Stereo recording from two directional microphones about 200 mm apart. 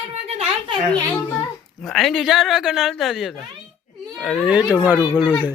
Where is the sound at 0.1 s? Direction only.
30° right (ahead or behind).